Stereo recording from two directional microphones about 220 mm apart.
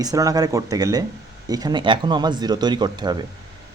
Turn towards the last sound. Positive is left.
turn(degrees=-20)  # may be behind; listen again after turning